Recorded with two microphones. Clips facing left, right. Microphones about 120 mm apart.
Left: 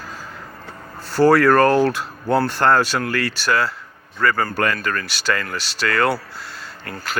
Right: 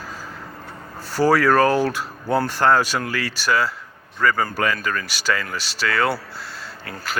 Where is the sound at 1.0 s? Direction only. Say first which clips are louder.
Left 3 dB; 10° right (ahead or behind).